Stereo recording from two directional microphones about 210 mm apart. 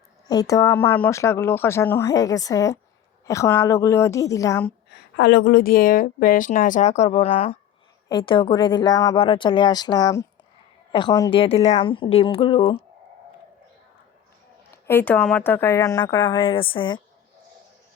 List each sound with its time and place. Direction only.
0.3 s a woman's voice: 15° left (ahead or behind)
5.1 s a woman's voice: 50° left (ahead or behind); by 12.7 s 25° left (ahead or behind)
14.8 s a woman's voice: 10° left (ahead or behind)